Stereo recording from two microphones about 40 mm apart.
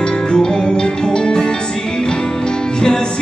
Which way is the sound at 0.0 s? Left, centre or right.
Centre.